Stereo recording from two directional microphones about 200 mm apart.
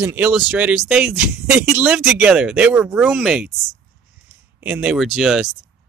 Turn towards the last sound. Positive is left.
turn(degrees=0)  # may be behind; listen again after turning